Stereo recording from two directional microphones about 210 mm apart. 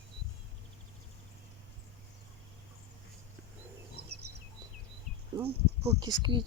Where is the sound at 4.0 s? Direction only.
50° right (ahead or behind).